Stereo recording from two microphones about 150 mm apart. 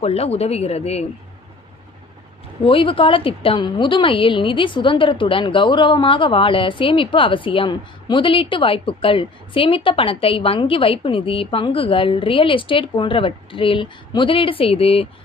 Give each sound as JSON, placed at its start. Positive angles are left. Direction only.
{"t": 0.0, "sound": "speech", "side_deg": 45}
{"t": 2.6, "sound": "a woman's voice", "side_deg": 35}